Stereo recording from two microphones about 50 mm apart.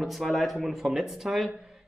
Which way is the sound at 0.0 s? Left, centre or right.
Centre.